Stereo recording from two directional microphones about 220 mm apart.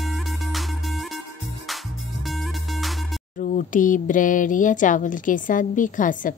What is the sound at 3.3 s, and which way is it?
Speech, 35° left (ahead or behind).